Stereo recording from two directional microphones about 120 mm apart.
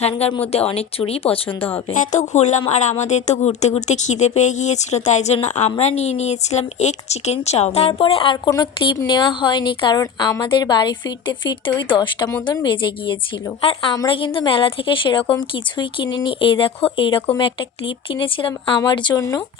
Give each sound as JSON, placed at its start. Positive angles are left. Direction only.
{"t": 0.3, "sound": "speech", "side_deg": 50}
{"t": 1.5, "sound": "speech", "side_deg": 15}
{"t": 2.0, "sound": "speech", "side_deg": 75}
{"t": 5.8, "sound": "speech", "side_deg": 65}
{"t": 8.4, "sound": "speech", "side_deg": 35}